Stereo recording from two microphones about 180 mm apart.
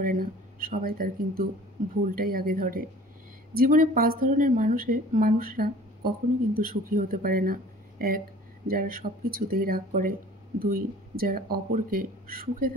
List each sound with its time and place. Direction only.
0.0 s speech: 50° right (ahead or behind)